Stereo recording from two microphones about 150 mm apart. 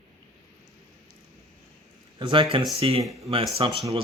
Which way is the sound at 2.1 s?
35° right (ahead or behind).